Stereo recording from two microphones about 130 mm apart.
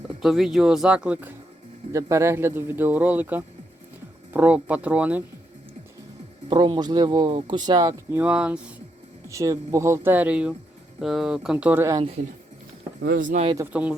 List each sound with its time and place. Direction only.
0.2 s speech: 5° right (ahead or behind)
1.9 s speech: 25° right (ahead or behind)
6.5 s speech: 35° right (ahead or behind)
8.1 s speech: 10° right (ahead or behind)
9.3 s speech: 25° right (ahead or behind)
13.1 s speech: 90° right
13.7 s speech: 10° right (ahead or behind)